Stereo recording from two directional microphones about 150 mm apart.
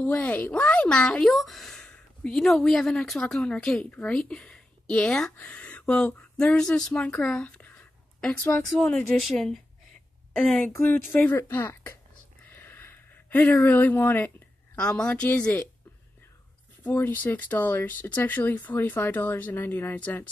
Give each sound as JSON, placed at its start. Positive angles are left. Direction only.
{"t": 0.0, "sound": "speech", "side_deg": 10}
{"t": 12.4, "sound": "a sound", "side_deg": 15}
{"t": 14.8, "sound": "speech", "side_deg": 5}
{"t": 16.8, "sound": "speech", "side_deg": 15}